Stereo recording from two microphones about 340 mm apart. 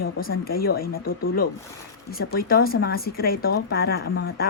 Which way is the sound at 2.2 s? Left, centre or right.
Left.